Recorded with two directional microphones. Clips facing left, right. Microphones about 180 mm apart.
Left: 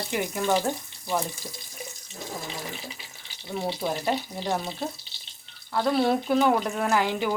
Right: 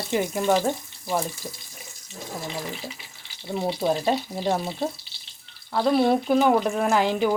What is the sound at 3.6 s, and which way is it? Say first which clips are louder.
Speech: right 5 dB; 20° right (ahead or behind).